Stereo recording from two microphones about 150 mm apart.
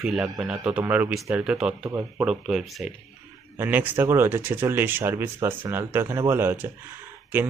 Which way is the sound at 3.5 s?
15° right (ahead or behind).